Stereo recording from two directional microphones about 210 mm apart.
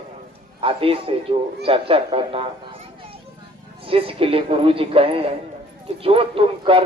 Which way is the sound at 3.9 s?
25° right (ahead or behind).